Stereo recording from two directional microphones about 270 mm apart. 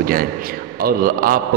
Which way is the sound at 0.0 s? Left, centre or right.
Right.